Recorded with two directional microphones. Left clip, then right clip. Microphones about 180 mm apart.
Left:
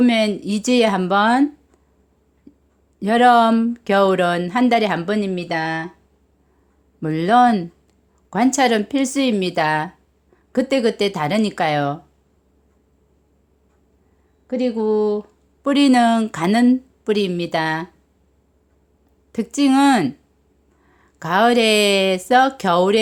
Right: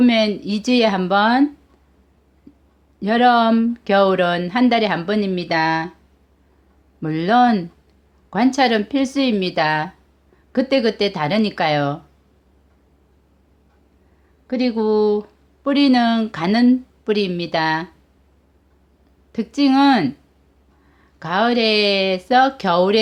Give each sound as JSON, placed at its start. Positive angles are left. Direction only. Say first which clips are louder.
{"t": 0.0, "sound": "a woman's voice", "louder": "right 1 dB", "side_deg": 15}
{"t": 3.0, "sound": "a woman's voice", "louder": "left 2 dB", "side_deg": 20}
{"t": 7.0, "sound": "a woman's voice", "louder": "left 1 dB", "side_deg": 15}
{"t": 14.4, "sound": "speech", "louder": "even", "side_deg": 5}
{"t": 15.6, "sound": "a woman's voice", "louder": "left 1 dB", "side_deg": 20}
{"t": 19.3, "sound": "a woman's voice", "louder": "even", "side_deg": 20}